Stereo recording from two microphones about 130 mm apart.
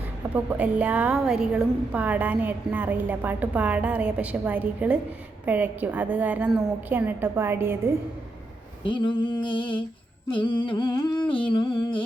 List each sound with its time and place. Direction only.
0.3 s a woman's voice: 10° right (ahead or behind)
8.9 s humming: 40° left (ahead or behind)